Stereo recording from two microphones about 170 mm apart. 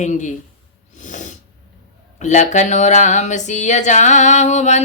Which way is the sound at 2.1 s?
45° left (ahead or behind).